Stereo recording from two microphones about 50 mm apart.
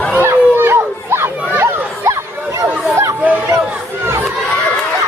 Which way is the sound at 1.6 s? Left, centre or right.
Right.